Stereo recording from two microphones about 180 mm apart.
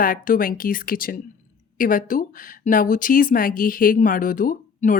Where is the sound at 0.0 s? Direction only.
50° left (ahead or behind).